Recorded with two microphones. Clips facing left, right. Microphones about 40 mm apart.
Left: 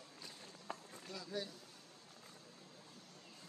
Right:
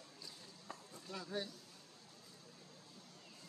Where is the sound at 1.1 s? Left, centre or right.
Right.